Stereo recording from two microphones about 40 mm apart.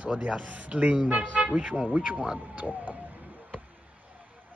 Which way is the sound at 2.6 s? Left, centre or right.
Right.